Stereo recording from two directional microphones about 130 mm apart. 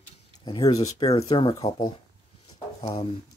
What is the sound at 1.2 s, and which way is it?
Speech, 40° left (ahead or behind).